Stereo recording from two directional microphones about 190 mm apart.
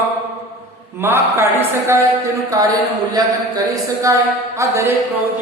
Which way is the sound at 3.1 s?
20° right (ahead or behind).